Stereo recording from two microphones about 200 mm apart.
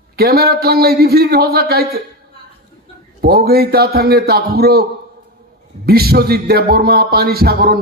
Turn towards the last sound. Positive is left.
turn(degrees=-50)  # may be behind; listen again after turning